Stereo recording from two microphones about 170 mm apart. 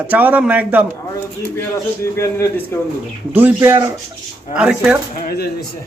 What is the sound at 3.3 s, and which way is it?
Speech, 10° right (ahead or behind).